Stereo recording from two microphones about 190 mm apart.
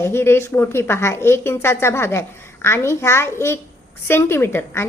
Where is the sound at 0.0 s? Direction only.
15° left (ahead or behind).